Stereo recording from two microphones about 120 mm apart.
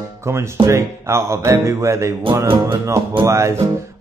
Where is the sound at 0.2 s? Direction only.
20° right (ahead or behind).